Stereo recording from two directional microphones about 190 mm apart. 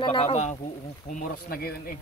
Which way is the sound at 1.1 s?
50° left (ahead or behind).